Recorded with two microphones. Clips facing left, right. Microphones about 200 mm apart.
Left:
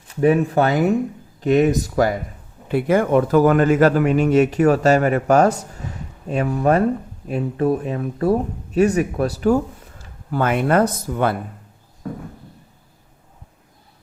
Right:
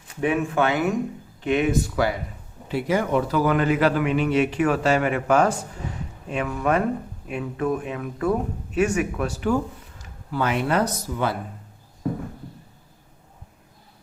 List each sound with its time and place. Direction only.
0.2 s speech: 35° left (ahead or behind)
2.6 s a man's voice: 55° left (ahead or behind); by 9.6 s 40° left (ahead or behind)
10.3 s a man's voice: 50° left (ahead or behind)